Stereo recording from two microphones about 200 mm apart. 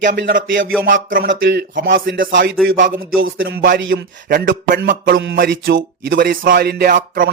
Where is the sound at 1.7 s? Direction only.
40° right (ahead or behind).